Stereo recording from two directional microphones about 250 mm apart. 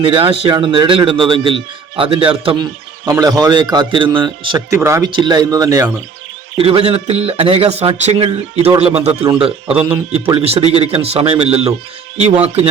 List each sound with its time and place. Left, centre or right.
0.0 s a man's voice: right